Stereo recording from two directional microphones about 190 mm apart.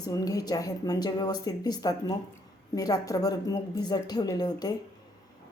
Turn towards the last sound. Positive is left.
turn(degrees=20)  # may be behind; listen again after turning